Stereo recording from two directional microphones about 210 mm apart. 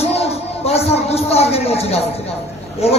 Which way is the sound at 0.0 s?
30° left (ahead or behind).